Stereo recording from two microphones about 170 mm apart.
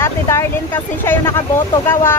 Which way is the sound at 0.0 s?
15° left (ahead or behind).